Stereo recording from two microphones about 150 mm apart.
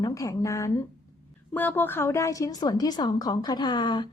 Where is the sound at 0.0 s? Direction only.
20° left (ahead or behind).